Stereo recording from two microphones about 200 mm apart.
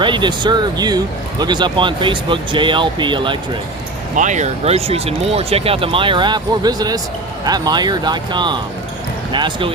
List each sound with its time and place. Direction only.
0.0 s speech: 25° right (ahead or behind)
4.1 s speech: 40° right (ahead or behind)